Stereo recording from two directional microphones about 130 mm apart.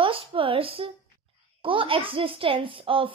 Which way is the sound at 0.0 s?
45° right (ahead or behind).